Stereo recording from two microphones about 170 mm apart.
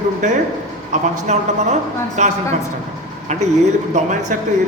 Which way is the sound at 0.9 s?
40° right (ahead or behind).